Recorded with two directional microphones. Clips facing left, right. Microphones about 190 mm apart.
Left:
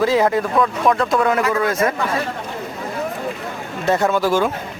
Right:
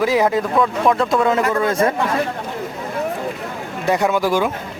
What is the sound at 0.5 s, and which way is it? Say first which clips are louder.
Speech: right 1 dB; centre (ahead or behind).